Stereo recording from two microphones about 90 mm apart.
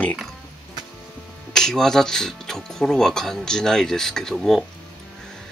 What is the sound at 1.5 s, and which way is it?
Speech, 5° left (ahead or behind).